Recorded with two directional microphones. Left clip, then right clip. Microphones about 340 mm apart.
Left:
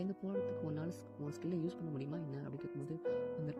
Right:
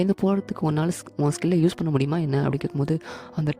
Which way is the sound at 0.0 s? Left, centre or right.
Right.